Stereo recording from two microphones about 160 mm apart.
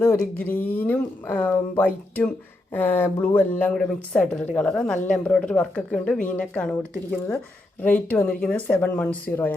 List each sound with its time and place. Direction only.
0.0 s speech: 15° left (ahead or behind)
7.8 s speech: 10° left (ahead or behind)